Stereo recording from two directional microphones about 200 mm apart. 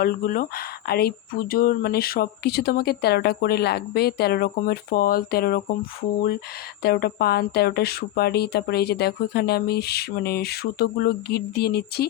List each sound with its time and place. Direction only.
0.0 s speech: 45° left (ahead or behind)
6.8 s speech: 50° left (ahead or behind)